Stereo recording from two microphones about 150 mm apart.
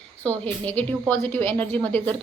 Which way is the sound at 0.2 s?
10° left (ahead or behind).